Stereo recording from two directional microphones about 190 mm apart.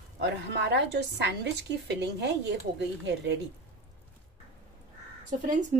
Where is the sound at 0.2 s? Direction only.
65° right (ahead or behind).